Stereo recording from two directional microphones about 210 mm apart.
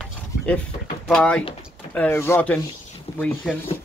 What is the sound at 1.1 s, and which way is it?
Speech, 5° left (ahead or behind).